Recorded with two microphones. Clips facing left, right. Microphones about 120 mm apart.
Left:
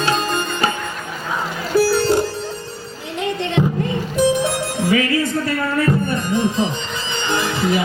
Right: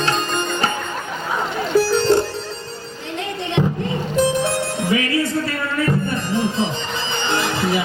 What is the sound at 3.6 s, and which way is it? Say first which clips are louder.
Music: even; centre (ahead or behind).